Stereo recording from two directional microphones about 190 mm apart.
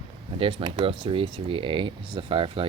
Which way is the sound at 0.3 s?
30° right (ahead or behind).